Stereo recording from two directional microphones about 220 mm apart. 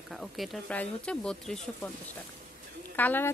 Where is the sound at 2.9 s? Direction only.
10° left (ahead or behind).